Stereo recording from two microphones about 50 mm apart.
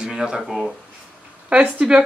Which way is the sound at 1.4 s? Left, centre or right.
Right.